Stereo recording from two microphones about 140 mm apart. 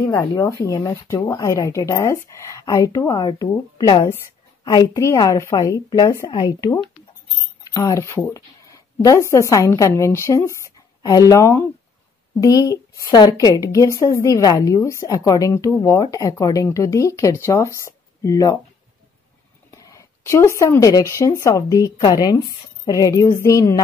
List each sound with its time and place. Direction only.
0.0 s a woman's voice: 25° left (ahead or behind)
19.7 s a woman's voice: 25° left (ahead or behind)